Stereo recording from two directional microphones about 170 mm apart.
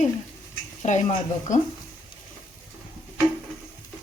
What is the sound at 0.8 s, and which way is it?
Speech, 45° left (ahead or behind).